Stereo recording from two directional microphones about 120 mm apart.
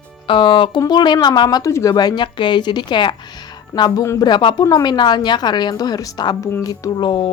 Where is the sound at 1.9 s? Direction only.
35° left (ahead or behind).